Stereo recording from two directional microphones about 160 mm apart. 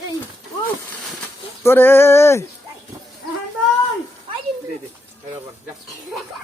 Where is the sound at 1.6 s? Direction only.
15° left (ahead or behind).